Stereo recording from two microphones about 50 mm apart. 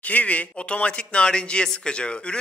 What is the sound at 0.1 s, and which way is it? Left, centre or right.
A man's voice, left.